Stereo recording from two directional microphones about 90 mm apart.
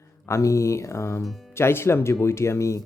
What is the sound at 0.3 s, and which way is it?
Speech, 35° left (ahead or behind).